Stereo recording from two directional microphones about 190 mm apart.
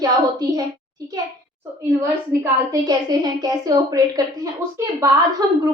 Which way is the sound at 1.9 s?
15° right (ahead or behind).